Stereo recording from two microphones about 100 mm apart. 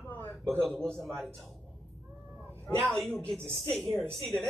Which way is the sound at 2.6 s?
Centre (ahead or behind).